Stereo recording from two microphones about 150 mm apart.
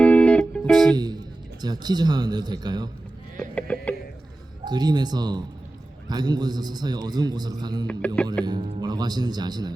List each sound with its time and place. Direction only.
0.0 s music: 10° left (ahead or behind)
0.9 s a man's voice: 25° right (ahead or behind)
3.5 s music: 10° left (ahead or behind)
4.6 s a man's voice: 30° right (ahead or behind)
7.9 s music: 10° left (ahead or behind)
8.4 s a man's voice: 30° right (ahead or behind)